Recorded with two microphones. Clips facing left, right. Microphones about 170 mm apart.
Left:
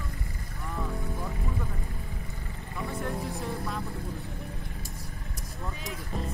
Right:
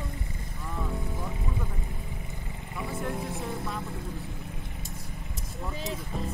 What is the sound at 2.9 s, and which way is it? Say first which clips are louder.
Speech: even; centre (ahead or behind).